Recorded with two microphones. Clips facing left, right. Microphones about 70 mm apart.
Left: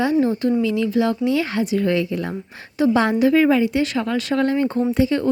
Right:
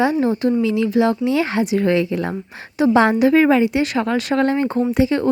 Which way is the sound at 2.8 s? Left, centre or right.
Right.